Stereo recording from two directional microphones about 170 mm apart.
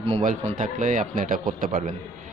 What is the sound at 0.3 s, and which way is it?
Speech, 50° right (ahead or behind).